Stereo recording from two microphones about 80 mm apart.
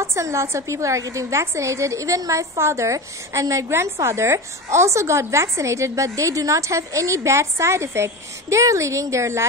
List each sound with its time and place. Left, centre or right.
0.0 s a woman's voice: right